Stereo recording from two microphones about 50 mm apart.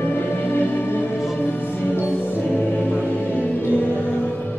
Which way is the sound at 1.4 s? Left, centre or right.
Left.